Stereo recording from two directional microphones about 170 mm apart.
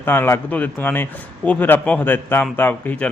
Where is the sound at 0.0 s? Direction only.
10° left (ahead or behind).